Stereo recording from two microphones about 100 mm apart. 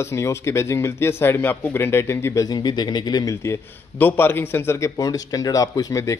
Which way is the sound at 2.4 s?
45° left (ahead or behind).